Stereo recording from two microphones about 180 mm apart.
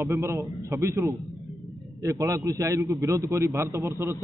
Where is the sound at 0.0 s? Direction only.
15° right (ahead or behind).